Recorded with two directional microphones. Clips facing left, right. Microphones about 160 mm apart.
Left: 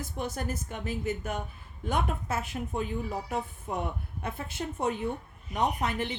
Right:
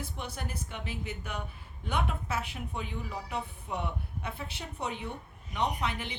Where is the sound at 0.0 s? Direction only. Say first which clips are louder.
Left 5 dB; 45° left (ahead or behind).